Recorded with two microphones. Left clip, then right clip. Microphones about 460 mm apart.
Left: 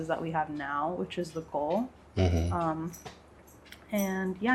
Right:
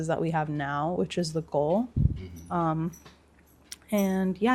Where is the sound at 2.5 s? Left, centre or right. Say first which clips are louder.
Right 3 dB; right.